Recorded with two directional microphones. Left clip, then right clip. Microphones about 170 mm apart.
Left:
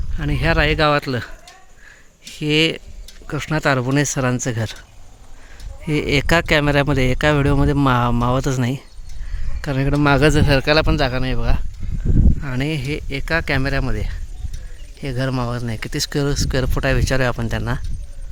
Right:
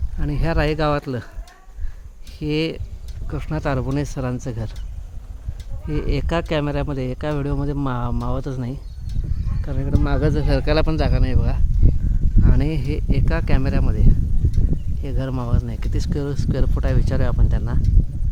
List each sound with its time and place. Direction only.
0.2 s speech: centre (ahead or behind)
2.3 s speech: centre (ahead or behind)
5.8 s speech: 10° left (ahead or behind)
12.4 s speech: 10° right (ahead or behind); by 17.7 s 15° left (ahead or behind)